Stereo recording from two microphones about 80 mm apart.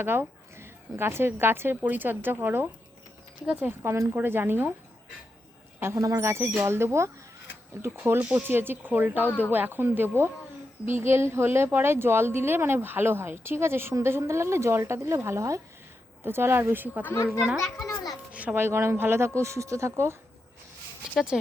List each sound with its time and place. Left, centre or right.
0.0 s a woman's voice: right
4.1 s speech: right
5.8 s a child's voice: right; by 17.6 s centre
17.8 s a sound: left
18.3 s a sound: centre
18.6 s speech: right